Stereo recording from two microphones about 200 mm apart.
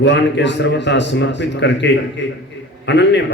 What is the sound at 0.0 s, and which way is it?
A man's voice, 60° left (ahead or behind).